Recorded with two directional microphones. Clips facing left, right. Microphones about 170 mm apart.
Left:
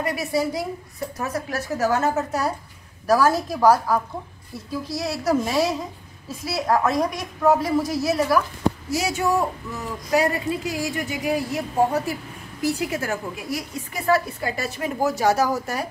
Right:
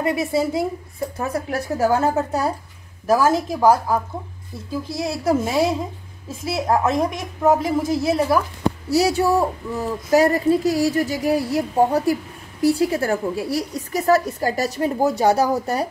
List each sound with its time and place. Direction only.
0.0 s a woman's voice: 25° right (ahead or behind)